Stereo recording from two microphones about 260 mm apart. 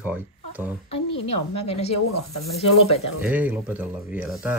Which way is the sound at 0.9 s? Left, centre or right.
Left.